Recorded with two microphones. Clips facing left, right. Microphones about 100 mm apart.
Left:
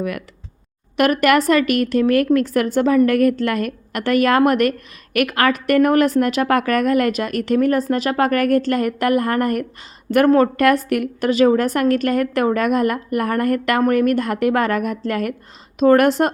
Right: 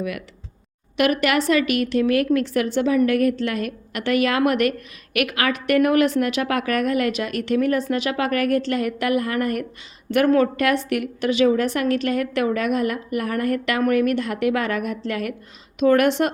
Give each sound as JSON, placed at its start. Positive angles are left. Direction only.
{"t": 0.9, "sound": "a woman's voice", "side_deg": 45}